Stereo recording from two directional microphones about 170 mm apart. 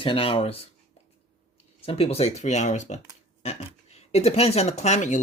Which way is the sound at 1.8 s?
35° left (ahead or behind).